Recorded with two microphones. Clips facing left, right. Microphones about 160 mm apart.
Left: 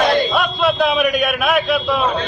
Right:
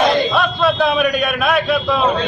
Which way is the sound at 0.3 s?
5° left (ahead or behind).